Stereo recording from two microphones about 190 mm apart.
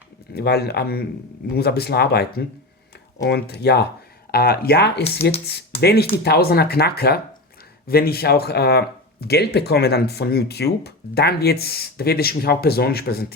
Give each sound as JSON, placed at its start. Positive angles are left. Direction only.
{"t": 0.3, "sound": "speech", "side_deg": 55}